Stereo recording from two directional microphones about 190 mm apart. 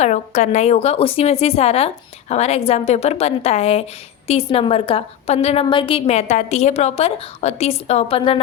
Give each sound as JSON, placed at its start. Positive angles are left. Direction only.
{"t": 0.0, "sound": "a woman's voice", "side_deg": 40}